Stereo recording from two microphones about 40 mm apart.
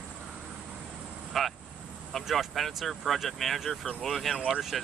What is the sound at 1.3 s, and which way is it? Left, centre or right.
Speech, centre.